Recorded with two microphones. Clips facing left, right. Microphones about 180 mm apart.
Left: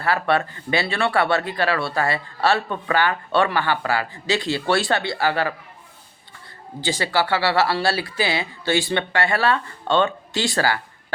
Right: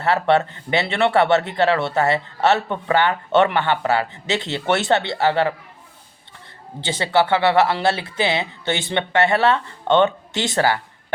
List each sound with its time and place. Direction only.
0.0 s speech: 25° right (ahead or behind)
6.8 s speech: 25° right (ahead or behind)